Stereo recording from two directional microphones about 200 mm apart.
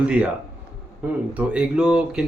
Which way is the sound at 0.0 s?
5° right (ahead or behind).